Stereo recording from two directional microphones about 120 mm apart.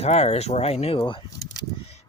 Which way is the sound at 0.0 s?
60° left (ahead or behind).